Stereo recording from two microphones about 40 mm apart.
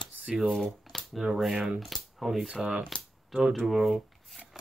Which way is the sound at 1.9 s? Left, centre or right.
Centre.